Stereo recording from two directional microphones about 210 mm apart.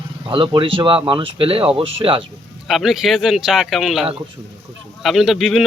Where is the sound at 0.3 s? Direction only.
25° right (ahead or behind).